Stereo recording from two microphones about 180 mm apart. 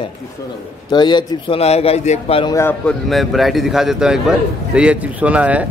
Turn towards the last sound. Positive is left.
turn(degrees=-10)  # may be behind; listen again after turning